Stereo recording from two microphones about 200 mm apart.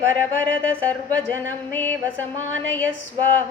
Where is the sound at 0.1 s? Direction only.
5° left (ahead or behind).